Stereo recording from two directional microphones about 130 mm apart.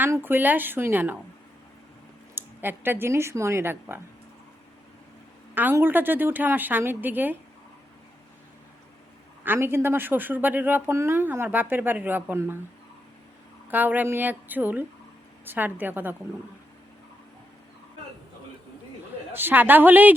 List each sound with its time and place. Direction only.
0.0 s speech: 15° right (ahead or behind)
2.3 s speech: 15° right (ahead or behind)
5.5 s speech: 15° right (ahead or behind)
9.4 s speech: 15° right (ahead or behind)
13.7 s speech: 15° right (ahead or behind)
19.3 s speech: 15° right (ahead or behind)